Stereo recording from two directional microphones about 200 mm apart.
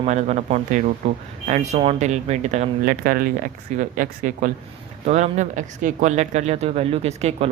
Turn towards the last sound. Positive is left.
turn(degrees=-30)  # may be behind; listen again after turning